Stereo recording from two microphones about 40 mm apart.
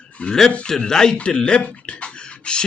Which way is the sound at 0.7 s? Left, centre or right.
Centre.